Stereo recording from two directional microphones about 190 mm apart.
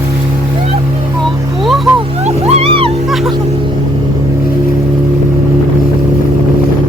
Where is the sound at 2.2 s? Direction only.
35° right (ahead or behind).